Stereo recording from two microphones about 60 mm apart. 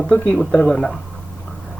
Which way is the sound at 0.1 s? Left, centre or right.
Centre.